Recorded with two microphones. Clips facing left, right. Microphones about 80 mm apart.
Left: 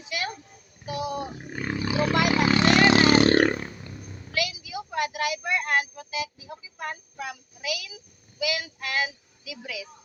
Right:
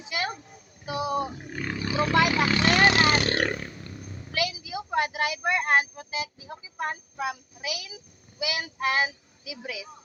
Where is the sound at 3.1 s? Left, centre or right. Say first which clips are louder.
Left 6 dB; left.